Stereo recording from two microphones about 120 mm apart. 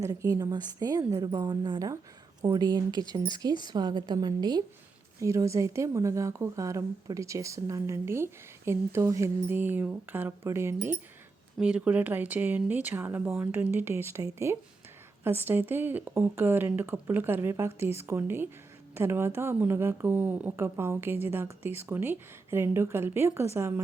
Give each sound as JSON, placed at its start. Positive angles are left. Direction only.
{"t": 0.0, "sound": "a woman's voice", "side_deg": -30}
{"t": 11.5, "sound": "speech", "side_deg": -10}